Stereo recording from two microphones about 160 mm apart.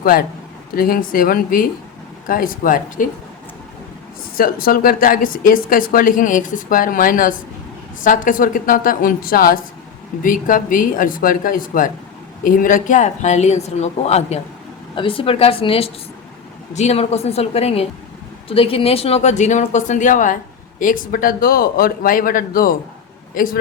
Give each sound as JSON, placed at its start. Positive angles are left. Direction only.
{"t": 0.0, "sound": "a man's voice", "side_deg": 65}
{"t": 4.4, "sound": "a woman's voice", "side_deg": 65}